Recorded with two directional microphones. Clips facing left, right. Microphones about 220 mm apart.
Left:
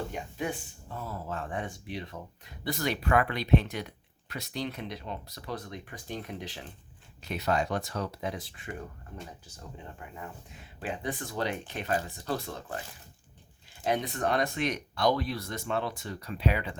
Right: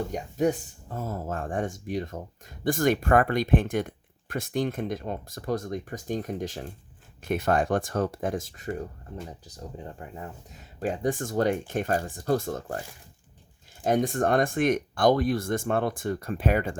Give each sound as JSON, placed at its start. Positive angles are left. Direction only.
{"t": 0.1, "sound": "speech", "side_deg": -40}
{"t": 13.8, "sound": "speech", "side_deg": -45}